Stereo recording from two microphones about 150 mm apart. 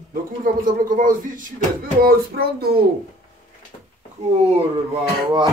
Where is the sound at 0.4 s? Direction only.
65° right (ahead or behind).